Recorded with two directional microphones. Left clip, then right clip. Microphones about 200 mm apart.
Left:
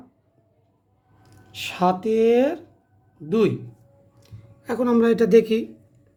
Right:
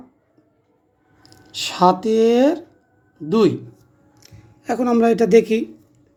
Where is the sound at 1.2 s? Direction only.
20° right (ahead or behind).